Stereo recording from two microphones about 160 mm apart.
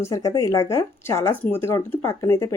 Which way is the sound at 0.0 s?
20° left (ahead or behind).